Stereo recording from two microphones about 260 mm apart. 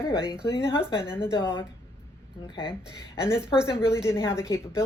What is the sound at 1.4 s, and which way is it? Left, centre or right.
Speech, centre.